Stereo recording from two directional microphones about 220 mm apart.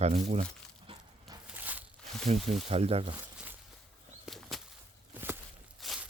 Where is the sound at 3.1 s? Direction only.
10° right (ahead or behind).